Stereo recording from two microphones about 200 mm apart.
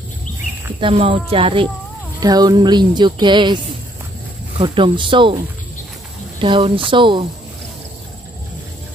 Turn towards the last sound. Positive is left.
turn(degrees=-25)  # may be behind; listen again after turning